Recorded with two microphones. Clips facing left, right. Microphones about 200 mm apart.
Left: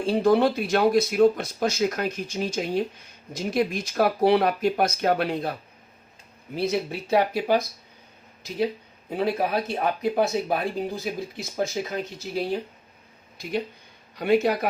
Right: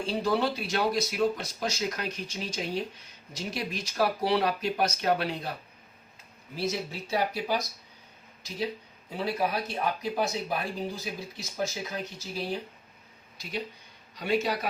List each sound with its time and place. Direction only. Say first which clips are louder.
0.0 s speech: left 8 dB; 55° left (ahead or behind)
6.6 s speech: left 6 dB; 60° left (ahead or behind)
9.0 s speech: left 5 dB; 55° left (ahead or behind)
14.2 s speech: left 7 dB; 55° left (ahead or behind)